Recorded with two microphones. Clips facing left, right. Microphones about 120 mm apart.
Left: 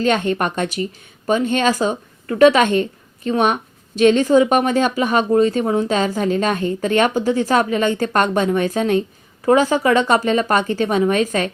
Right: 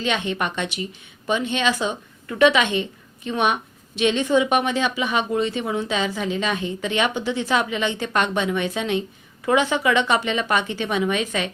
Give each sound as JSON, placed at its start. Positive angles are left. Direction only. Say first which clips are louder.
{"t": 0.0, "sound": "a woman's voice", "louder": "left 6 dB", "side_deg": 45}